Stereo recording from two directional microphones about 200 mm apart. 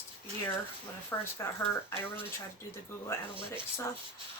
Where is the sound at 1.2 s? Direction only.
15° left (ahead or behind).